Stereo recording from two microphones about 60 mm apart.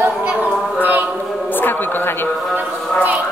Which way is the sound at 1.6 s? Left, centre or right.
Left.